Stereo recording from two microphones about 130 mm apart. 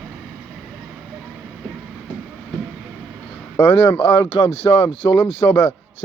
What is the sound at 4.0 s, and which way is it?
Speech, 40° left (ahead or behind).